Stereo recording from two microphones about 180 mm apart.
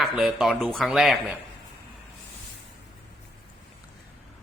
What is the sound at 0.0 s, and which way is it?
Speech, centre (ahead or behind).